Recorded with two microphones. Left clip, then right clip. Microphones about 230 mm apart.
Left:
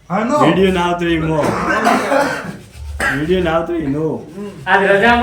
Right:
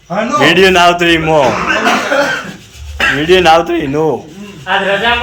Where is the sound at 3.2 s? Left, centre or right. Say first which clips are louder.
Right 12 dB; centre.